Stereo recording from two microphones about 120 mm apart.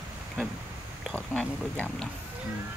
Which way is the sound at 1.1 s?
10° left (ahead or behind).